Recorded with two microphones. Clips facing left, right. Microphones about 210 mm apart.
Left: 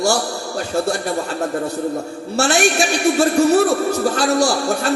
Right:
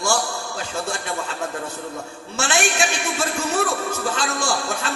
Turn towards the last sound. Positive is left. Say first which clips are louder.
# left 8 dB
turn(degrees=40)  # may be behind; listen again after turning